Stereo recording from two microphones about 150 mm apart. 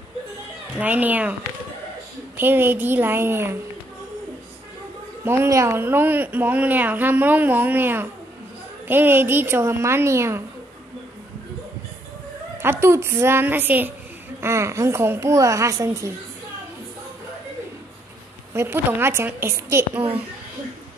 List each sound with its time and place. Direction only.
0.7 s speech: 10° right (ahead or behind)
2.3 s speech: 15° right (ahead or behind)
5.2 s speech: 15° right (ahead or behind)
12.6 s speech: 15° right (ahead or behind)
18.5 s speech: 15° right (ahead or behind)